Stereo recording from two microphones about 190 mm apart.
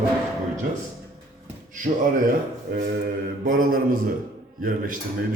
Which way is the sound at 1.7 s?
45° right (ahead or behind).